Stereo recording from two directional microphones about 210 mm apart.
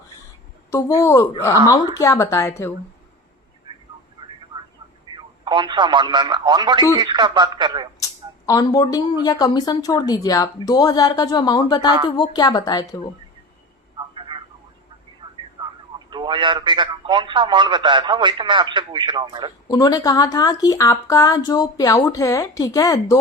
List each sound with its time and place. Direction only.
0.7 s speech: 15° left (ahead or behind)
3.7 s vehicle: 20° right (ahead or behind)
5.1 s speech: 20° right (ahead or behind)
8.4 s a woman's voice: 15° left (ahead or behind)
13.9 s telephone: 20° right (ahead or behind)
15.6 s speech: 20° right (ahead or behind)
19.6 s speech: 20° left (ahead or behind)